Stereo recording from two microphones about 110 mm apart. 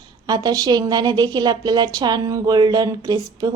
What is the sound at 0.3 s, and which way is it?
A woman's voice, 35° right (ahead or behind).